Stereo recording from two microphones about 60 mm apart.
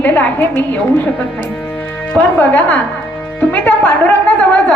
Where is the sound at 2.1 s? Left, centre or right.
Left.